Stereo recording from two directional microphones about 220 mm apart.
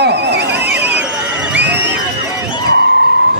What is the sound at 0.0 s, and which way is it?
Neigh, 50° right (ahead or behind).